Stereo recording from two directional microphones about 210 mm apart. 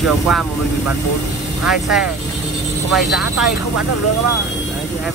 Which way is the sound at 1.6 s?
5° right (ahead or behind).